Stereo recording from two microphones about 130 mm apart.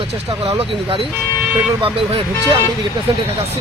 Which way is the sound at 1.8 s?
45° right (ahead or behind).